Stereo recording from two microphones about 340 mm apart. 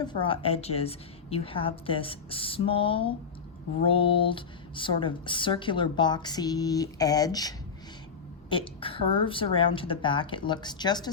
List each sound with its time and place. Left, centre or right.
0.0 s speech: centre